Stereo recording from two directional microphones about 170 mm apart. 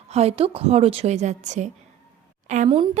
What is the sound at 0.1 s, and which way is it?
A woman's voice, 35° right (ahead or behind).